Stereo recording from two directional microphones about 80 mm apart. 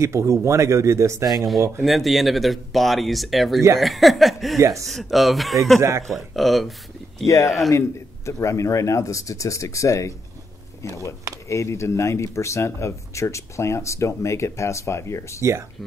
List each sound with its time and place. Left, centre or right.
0.0 s speech: right
1.3 s speech: centre
4.6 s speech: right
4.8 s speech: centre
5.8 s speech: right
6.0 s speech: centre
7.2 s speech: left
11.4 s speech: left